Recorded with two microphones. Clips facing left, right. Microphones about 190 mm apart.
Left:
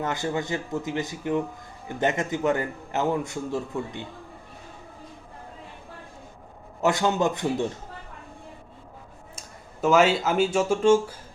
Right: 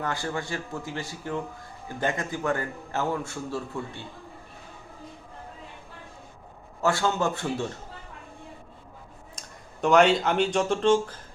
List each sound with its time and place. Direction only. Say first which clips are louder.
0.0 s a man's voice: left 3 dB; 20° left (ahead or behind)
6.8 s a man's voice: left 2 dB; 20° left (ahead or behind)
9.8 s speech: even; 5° left (ahead or behind)